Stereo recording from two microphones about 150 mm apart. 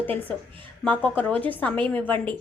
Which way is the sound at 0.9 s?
10° left (ahead or behind).